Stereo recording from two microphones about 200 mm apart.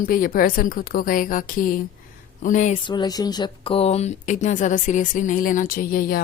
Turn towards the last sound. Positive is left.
turn(degrees=45)  # may be behind; listen again after turning